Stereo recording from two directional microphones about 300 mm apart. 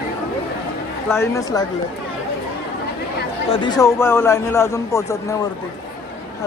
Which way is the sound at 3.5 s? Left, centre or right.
Centre.